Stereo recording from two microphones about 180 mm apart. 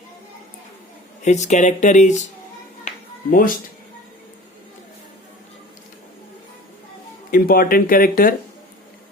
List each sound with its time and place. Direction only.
1.2 s speech: 40° left (ahead or behind)
2.8 s music: 50° left (ahead or behind)
7.3 s speech: 55° left (ahead or behind)